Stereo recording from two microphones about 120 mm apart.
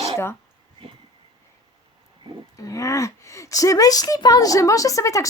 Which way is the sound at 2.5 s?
25° left (ahead or behind).